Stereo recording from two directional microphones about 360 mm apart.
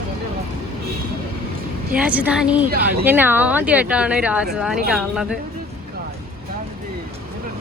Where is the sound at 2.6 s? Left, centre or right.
Right.